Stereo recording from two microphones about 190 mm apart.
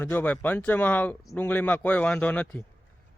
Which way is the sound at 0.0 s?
10° left (ahead or behind).